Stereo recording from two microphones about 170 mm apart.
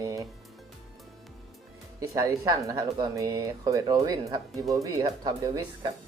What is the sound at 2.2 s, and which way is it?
Speech, 20° right (ahead or behind).